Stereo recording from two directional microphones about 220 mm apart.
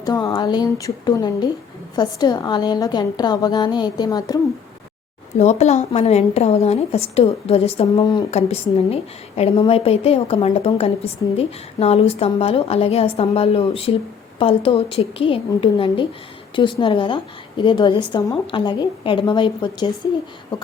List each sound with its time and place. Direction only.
0.0 s a woman's voice: 15° left (ahead or behind)
5.4 s a woman's voice: 30° left (ahead or behind)